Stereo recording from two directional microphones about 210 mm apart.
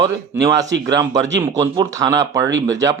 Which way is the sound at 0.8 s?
20° right (ahead or behind).